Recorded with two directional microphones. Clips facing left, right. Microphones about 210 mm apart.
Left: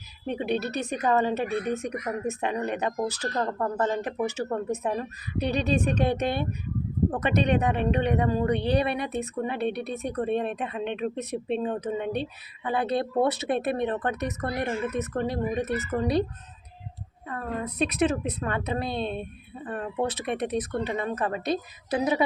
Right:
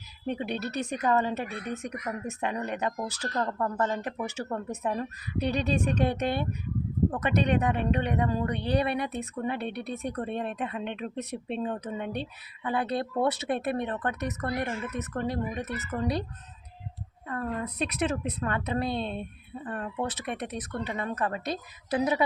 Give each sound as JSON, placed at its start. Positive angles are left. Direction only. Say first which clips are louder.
{"t": 0.3, "sound": "speech", "louder": "left 4 dB", "side_deg": 20}
{"t": 17.7, "sound": "a woman's voice", "louder": "left 7 dB", "side_deg": 20}